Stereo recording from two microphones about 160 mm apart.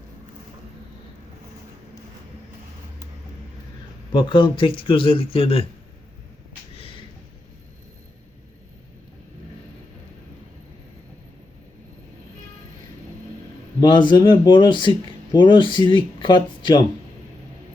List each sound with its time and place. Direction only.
4.1 s a man's voice: 30° left (ahead or behind)
6.7 s a sound: 35° left (ahead or behind)
13.8 s speech: 30° left (ahead or behind)